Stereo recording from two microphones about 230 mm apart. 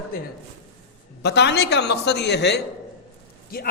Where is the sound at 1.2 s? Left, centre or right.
Left.